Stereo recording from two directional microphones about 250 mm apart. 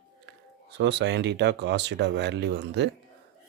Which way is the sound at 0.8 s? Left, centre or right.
Right.